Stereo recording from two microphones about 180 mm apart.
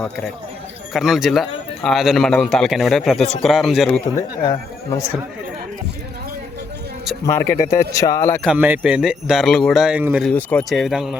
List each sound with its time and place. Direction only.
0.9 s speech: centre (ahead or behind)
4.1 s speech: 25° left (ahead or behind)
7.6 s speech: 15° left (ahead or behind)
8.5 s speech: 10° right (ahead or behind)
10.2 s speech: 5° left (ahead or behind)